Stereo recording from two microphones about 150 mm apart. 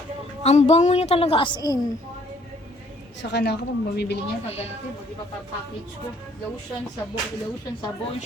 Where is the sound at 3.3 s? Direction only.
90° left.